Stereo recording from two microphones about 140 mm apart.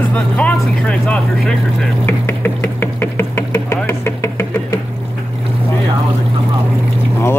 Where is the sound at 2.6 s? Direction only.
15° left (ahead or behind).